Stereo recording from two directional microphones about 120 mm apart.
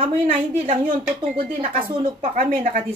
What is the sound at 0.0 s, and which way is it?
A woman's voice, 50° right (ahead or behind).